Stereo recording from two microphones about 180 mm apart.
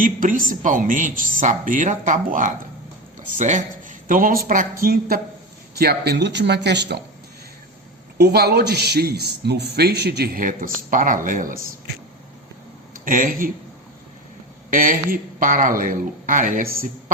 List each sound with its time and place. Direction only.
0.0 s a man's voice: 50° right (ahead or behind); by 7.0 s 70° right (ahead or behind)
8.2 s a man's voice: 65° right (ahead or behind); by 11.6 s 50° right (ahead or behind)
12.9 s speech: 50° right (ahead or behind)
14.7 s speech: 50° right (ahead or behind)